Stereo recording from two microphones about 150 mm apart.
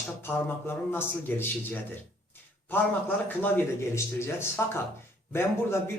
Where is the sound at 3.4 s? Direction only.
10° left (ahead or behind).